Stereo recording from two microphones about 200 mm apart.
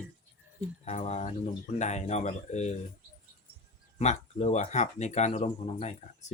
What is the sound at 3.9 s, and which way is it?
Speech, 35° left (ahead or behind).